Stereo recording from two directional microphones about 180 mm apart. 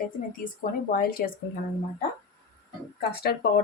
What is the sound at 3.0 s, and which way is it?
Speech, 60° left (ahead or behind).